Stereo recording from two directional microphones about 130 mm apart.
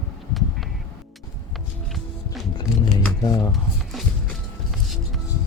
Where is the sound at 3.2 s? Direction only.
30° left (ahead or behind).